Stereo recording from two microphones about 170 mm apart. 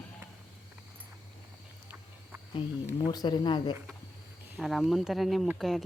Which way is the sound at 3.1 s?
25° left (ahead or behind).